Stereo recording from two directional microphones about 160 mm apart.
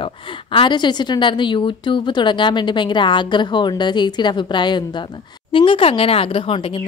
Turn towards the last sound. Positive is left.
turn(degrees=35)  # may be behind; listen again after turning